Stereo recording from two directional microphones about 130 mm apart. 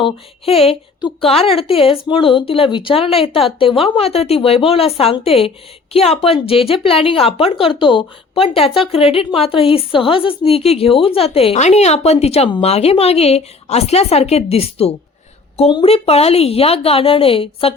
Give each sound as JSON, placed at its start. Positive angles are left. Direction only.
{"t": 0.0, "sound": "a woman's voice", "side_deg": 50}